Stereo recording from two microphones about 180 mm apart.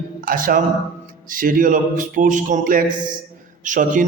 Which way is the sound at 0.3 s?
50° right (ahead or behind).